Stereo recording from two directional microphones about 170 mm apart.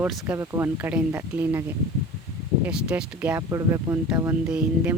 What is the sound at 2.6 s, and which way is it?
Speech, 5° right (ahead or behind).